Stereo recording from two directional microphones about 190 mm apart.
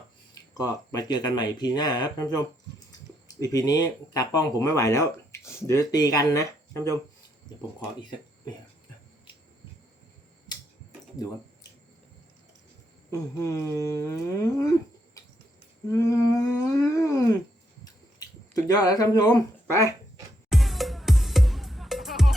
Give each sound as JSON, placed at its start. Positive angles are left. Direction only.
{"t": 0.5, "sound": "speech", "side_deg": 20}
{"t": 6.7, "sound": "speech", "side_deg": -15}
{"t": 13.1, "sound": "a sound", "side_deg": 15}
{"t": 15.2, "sound": "cricket", "side_deg": 20}
{"t": 15.9, "sound": "a sound", "side_deg": 15}
{"t": 18.2, "sound": "speech", "side_deg": 20}
{"t": 20.5, "sound": "music", "side_deg": 0}